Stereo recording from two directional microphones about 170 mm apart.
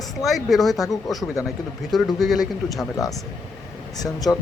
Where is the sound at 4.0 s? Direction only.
20° left (ahead or behind).